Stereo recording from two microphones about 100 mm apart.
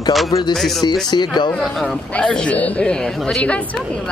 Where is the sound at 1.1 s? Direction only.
45° left (ahead or behind).